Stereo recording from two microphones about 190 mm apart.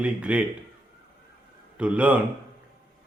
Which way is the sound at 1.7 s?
5° right (ahead or behind).